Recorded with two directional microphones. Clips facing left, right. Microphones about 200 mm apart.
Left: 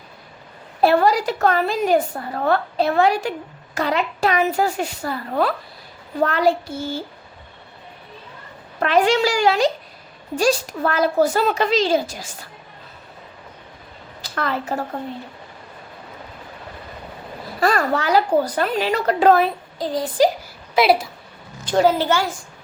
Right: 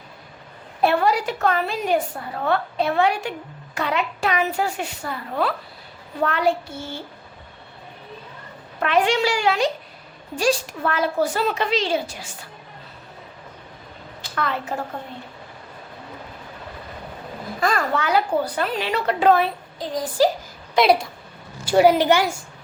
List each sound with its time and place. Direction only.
0.8 s a woman's voice: 35° left (ahead or behind)
8.8 s a woman's voice: 40° left (ahead or behind)
14.2 s a woman's voice: 40° left (ahead or behind)
17.6 s a woman's voice: 35° left (ahead or behind)
20.7 s a woman's voice: 5° left (ahead or behind)
21.6 s a child's voice: 10° right (ahead or behind)